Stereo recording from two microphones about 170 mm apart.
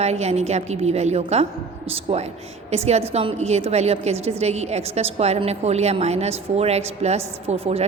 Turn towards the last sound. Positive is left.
turn(degrees=-35)  # may be behind; listen again after turning